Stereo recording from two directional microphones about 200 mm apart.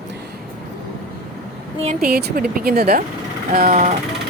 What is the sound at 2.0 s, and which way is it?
Speech, 50° right (ahead or behind).